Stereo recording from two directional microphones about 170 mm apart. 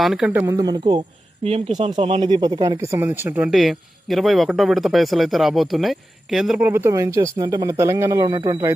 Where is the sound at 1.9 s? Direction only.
30° right (ahead or behind).